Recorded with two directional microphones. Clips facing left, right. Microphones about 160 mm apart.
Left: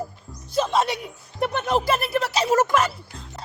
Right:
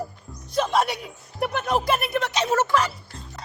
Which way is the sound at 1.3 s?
Centre (ahead or behind).